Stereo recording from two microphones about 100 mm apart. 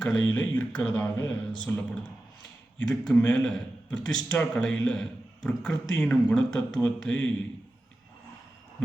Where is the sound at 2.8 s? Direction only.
10° left (ahead or behind).